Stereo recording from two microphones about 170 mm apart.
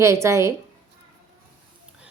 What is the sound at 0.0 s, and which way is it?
Speech, 15° right (ahead or behind).